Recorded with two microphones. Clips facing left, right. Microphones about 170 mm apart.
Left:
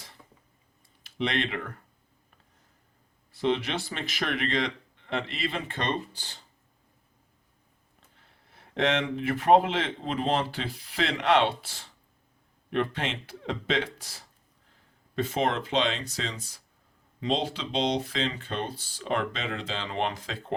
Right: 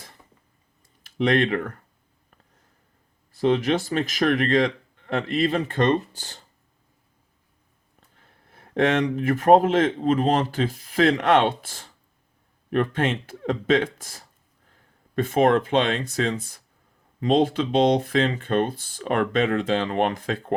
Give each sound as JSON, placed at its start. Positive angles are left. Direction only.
{"t": 1.0, "sound": "speech", "side_deg": -50}
{"t": 3.3, "sound": "speech", "side_deg": -50}
{"t": 8.2, "sound": "speech", "side_deg": -50}